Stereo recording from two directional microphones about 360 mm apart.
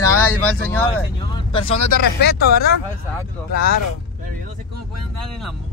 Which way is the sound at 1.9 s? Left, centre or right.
Left.